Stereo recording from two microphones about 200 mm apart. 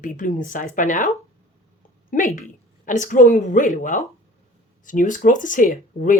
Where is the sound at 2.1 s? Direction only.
40° left (ahead or behind).